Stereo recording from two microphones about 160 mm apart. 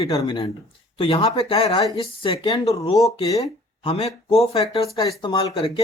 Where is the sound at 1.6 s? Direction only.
25° left (ahead or behind).